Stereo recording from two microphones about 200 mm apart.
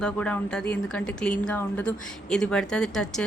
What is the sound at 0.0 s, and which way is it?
A woman's voice, 5° left (ahead or behind).